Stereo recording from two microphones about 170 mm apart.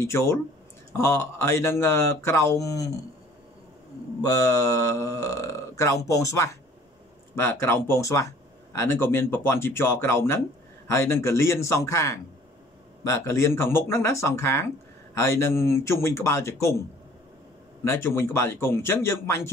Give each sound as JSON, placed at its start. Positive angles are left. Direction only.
{"t": 0.0, "sound": "speech", "side_deg": 15}
{"t": 4.2, "sound": "speech", "side_deg": 20}
{"t": 17.8, "sound": "speech", "side_deg": 15}